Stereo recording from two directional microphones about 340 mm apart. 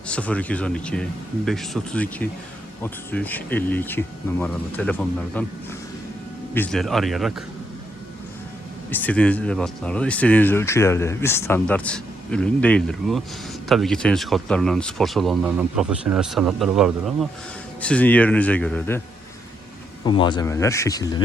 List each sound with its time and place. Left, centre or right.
0.1 s speech: centre
6.5 s speech: centre
8.9 s speech: centre
20.1 s speech: centre